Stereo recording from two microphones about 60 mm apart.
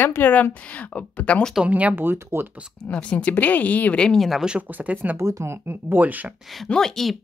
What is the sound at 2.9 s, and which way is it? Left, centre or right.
A woman's voice, centre.